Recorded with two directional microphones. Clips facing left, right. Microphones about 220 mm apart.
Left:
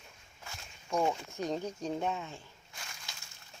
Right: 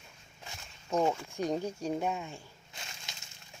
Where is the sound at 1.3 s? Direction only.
10° right (ahead or behind).